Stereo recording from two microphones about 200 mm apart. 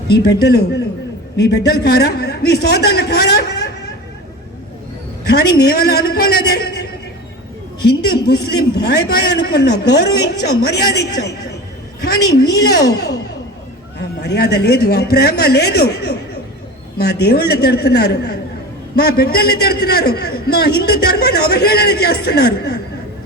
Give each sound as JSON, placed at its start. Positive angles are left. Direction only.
{"t": 0.3, "sound": "a man's voice", "side_deg": 55}
{"t": 5.2, "sound": "a man's voice", "side_deg": 50}
{"t": 7.9, "sound": "a man's voice", "side_deg": 50}
{"t": 14.2, "sound": "a man's voice", "side_deg": 55}